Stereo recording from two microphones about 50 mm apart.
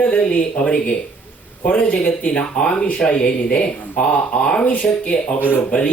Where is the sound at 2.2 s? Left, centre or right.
Centre.